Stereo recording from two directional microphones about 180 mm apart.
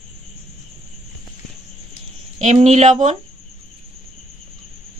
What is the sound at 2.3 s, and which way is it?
Speech, 40° right (ahead or behind).